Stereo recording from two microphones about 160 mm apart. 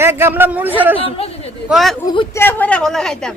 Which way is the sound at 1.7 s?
Centre (ahead or behind).